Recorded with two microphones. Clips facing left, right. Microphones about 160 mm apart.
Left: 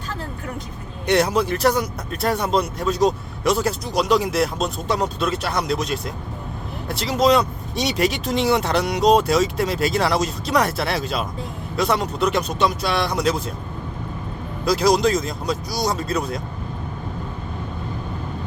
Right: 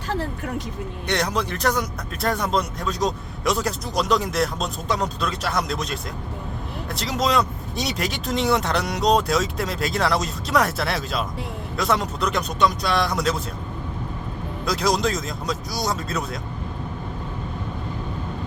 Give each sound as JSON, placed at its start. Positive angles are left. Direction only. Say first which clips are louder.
{"t": 1.0, "sound": "speech", "louder": "left 6 dB", "side_deg": 5}
{"t": 14.6, "sound": "speech", "louder": "left 5 dB", "side_deg": 0}